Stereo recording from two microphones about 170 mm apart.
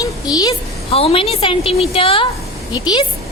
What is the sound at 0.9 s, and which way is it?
A woman's voice, 35° left (ahead or behind).